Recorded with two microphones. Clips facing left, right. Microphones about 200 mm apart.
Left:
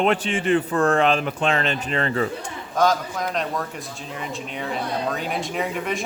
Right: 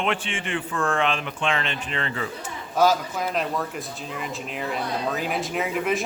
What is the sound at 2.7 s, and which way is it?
Speech, 5° right (ahead or behind).